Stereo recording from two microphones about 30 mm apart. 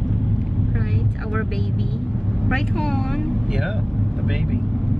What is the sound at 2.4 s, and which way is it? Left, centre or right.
Speech, centre.